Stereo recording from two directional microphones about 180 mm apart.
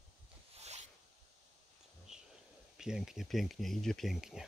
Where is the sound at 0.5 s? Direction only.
35° right (ahead or behind).